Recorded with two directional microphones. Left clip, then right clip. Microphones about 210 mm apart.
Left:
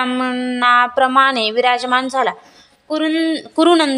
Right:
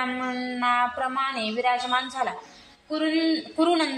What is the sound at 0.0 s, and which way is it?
A woman's voice, 50° left (ahead or behind).